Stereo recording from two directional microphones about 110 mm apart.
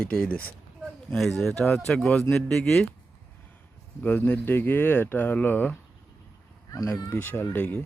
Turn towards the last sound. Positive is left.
turn(degrees=20)  # may be behind; listen again after turning